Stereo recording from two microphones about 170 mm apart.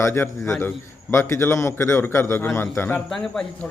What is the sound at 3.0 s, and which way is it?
Speech, centre (ahead or behind).